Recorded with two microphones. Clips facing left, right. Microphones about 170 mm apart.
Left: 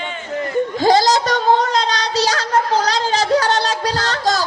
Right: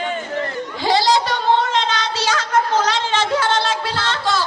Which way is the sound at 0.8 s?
45° left (ahead or behind).